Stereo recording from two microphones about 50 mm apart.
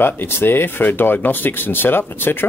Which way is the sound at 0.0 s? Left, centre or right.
Left.